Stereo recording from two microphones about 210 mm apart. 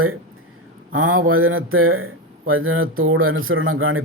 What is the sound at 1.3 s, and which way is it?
Speech, 75° right (ahead or behind).